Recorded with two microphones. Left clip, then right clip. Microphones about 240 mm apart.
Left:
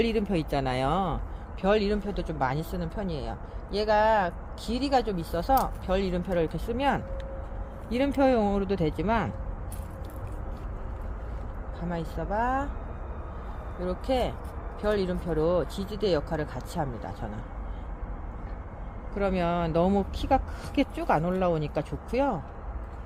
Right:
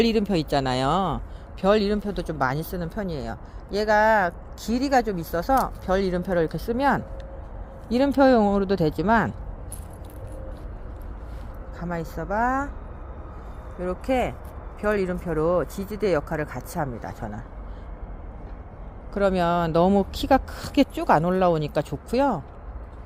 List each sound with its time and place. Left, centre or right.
0.0 s speech: right
11.9 s speech: right
13.8 s speech: right
19.1 s speech: right